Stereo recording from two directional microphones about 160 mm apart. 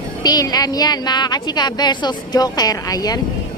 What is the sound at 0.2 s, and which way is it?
A woman's voice, 25° left (ahead or behind).